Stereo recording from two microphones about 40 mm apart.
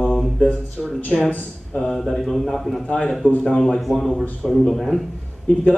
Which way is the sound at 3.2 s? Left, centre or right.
Left.